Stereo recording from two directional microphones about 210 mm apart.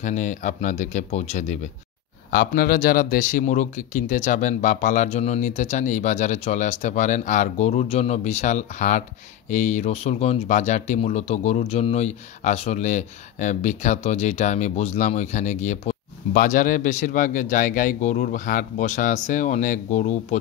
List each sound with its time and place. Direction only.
0.0 s speech: 35° left (ahead or behind)
2.3 s speech: 45° left (ahead or behind)